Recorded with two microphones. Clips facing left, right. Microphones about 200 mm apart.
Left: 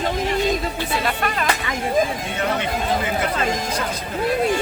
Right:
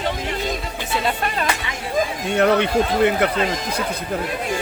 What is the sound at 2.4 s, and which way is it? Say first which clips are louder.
Speech: right 8 dB; 65° right (ahead or behind).